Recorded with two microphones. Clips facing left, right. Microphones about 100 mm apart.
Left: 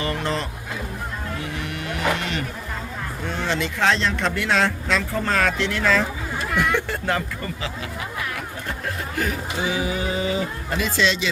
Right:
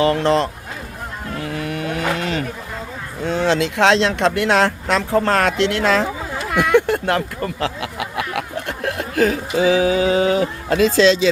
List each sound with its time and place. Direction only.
0.0 s speech: 90° right
3.2 s speech: 90° right